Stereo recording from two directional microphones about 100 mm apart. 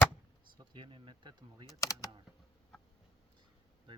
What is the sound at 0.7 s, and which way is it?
Speech, 60° right (ahead or behind).